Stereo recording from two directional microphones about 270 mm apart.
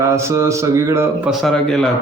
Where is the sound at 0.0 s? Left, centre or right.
Centre.